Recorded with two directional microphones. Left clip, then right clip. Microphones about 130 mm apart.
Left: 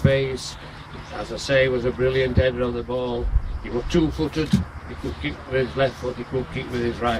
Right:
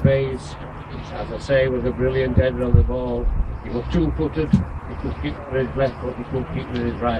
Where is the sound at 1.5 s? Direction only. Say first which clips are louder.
Even; 35° left (ahead or behind).